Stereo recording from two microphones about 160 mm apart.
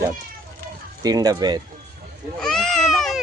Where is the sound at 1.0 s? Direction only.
25° right (ahead or behind).